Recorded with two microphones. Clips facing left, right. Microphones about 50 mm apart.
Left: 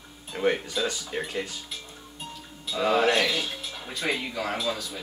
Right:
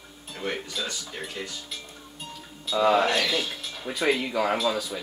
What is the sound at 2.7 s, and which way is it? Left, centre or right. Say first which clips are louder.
Speech: right 1 dB; centre.